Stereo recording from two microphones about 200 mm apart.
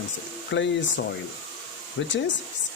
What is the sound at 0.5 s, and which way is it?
Speech, 65° left (ahead or behind).